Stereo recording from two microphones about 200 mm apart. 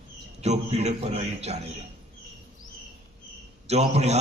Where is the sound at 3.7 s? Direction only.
35° right (ahead or behind).